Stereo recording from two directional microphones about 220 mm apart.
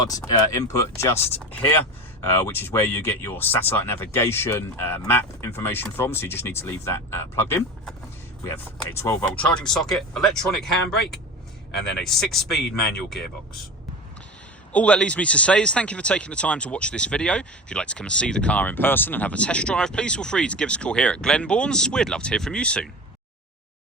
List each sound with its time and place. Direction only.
0.3 s speech: 15° left (ahead or behind)
10.9 s speech: 50° left (ahead or behind)
12.0 s speech: centre (ahead or behind)
14.7 s speech: 5° left (ahead or behind)